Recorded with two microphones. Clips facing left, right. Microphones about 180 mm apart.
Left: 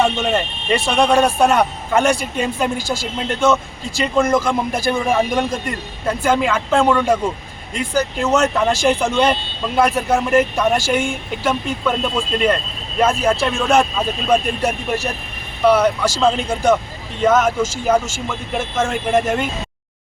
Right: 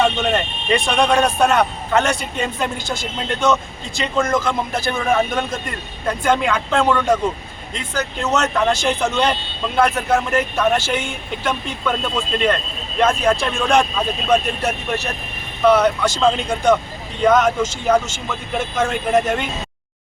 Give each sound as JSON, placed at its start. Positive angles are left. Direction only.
{"t": 0.0, "sound": "speech", "side_deg": 5}